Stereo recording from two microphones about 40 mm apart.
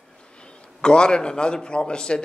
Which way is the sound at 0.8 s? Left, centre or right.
Left.